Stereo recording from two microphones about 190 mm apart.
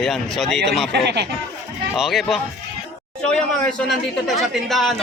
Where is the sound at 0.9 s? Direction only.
65° right (ahead or behind).